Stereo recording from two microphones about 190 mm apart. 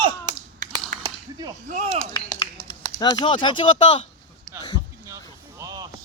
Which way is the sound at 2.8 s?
20° left (ahead or behind).